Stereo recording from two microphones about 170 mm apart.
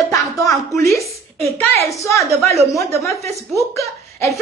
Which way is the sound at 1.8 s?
20° left (ahead or behind).